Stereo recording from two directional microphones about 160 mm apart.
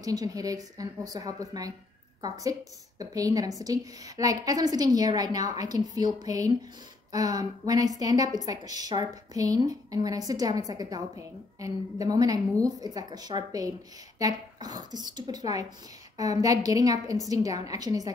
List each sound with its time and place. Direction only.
0.0 s a woman's voice: 20° right (ahead or behind)
3.0 s a woman's voice: 20° right (ahead or behind)